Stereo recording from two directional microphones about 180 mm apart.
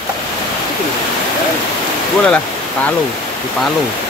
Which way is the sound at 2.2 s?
5° left (ahead or behind).